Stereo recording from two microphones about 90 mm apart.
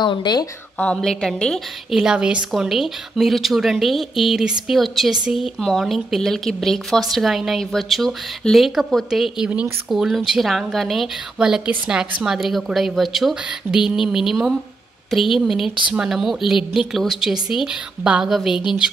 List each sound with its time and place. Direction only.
0.0 s speech: 60° left (ahead or behind)
0.7 s a woman's voice: 10° left (ahead or behind)